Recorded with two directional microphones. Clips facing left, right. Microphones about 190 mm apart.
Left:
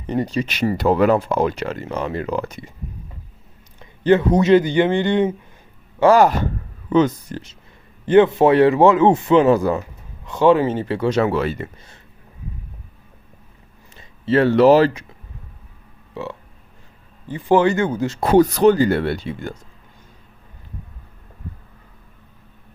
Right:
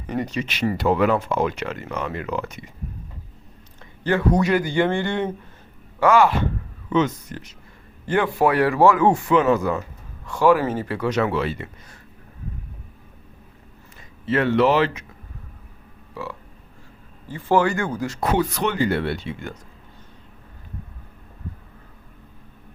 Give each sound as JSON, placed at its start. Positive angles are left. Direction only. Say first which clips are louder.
{"t": 0.1, "sound": "speech", "louder": "left 4 dB", "side_deg": 30}
{"t": 4.0, "sound": "speech", "louder": "left 5 dB", "side_deg": 20}
{"t": 6.0, "sound": "speech", "louder": "left 4 dB", "side_deg": 35}
{"t": 10.2, "sound": "speech", "louder": "left 3 dB", "side_deg": 20}
{"t": 14.3, "sound": "speech", "louder": "left 6 dB", "side_deg": 35}
{"t": 16.2, "sound": "speech", "louder": "left 3 dB", "side_deg": 25}